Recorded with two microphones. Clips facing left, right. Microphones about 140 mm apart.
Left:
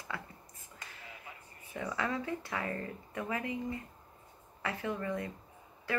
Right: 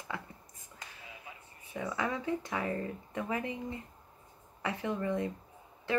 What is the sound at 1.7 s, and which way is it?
Speech, 15° right (ahead or behind).